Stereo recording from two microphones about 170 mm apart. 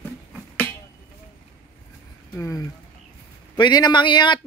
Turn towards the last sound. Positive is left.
turn(degrees=25)  # may be behind; listen again after turning